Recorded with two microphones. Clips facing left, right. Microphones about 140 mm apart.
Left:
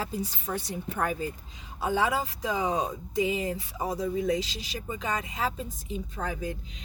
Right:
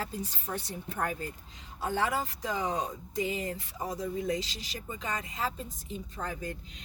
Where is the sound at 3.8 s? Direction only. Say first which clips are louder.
Left 5 dB; 70° left (ahead or behind).